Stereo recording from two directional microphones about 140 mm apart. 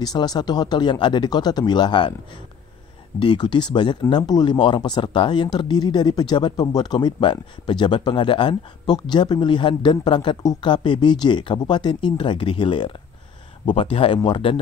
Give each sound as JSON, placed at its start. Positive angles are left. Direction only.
{"t": 0.0, "sound": "speech", "side_deg": 30}
{"t": 3.2, "sound": "speech", "side_deg": 35}